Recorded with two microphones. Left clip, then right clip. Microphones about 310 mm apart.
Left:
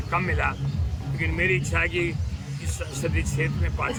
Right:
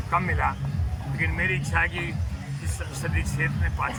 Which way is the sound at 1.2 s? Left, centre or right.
Right.